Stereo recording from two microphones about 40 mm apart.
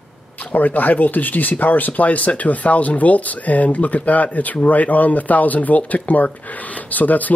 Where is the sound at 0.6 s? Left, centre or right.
Left.